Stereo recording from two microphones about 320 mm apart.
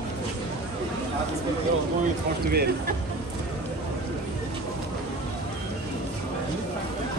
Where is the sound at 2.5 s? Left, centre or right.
Right.